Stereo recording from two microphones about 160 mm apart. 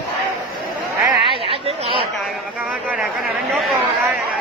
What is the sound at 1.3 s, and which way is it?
Chatter, 35° right (ahead or behind).